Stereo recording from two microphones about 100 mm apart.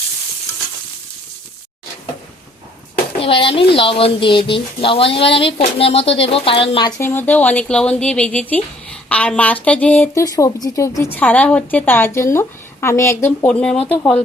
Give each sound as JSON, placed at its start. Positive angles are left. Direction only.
{"t": 3.2, "sound": "speech", "side_deg": 65}
{"t": 7.0, "sound": "speech", "side_deg": 20}
{"t": 10.2, "sound": "speech", "side_deg": 35}
{"t": 11.1, "sound": "a woman's voice", "side_deg": 15}